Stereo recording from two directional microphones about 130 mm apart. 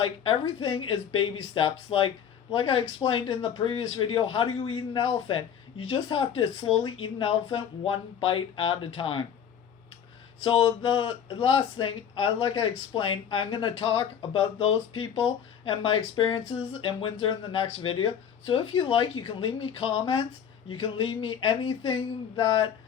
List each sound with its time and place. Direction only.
0.0 s speech: 45° left (ahead or behind)
10.4 s speech: 45° left (ahead or behind)